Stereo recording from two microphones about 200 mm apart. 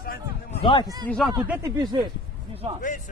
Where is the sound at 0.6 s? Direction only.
25° left (ahead or behind).